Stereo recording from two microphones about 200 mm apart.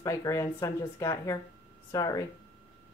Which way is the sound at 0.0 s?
15° left (ahead or behind).